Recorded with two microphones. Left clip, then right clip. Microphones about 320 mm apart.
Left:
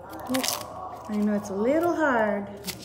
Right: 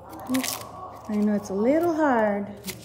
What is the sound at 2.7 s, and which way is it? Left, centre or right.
Shuffling cards, centre.